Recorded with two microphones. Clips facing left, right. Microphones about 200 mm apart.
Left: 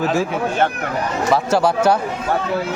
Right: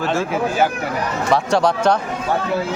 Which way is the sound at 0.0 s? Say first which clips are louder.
Left 1 dB; centre (ahead or behind).